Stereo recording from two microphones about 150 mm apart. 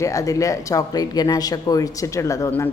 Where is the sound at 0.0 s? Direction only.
20° left (ahead or behind).